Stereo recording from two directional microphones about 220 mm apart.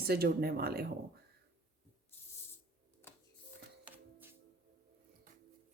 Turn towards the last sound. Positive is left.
turn(degrees=-10)  # may be behind; listen again after turning